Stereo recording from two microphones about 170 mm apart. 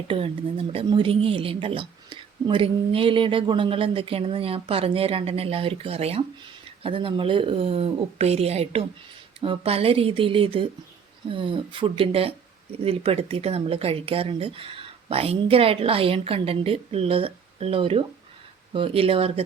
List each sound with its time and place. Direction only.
0.1 s a woman's voice: 35° right (ahead or behind)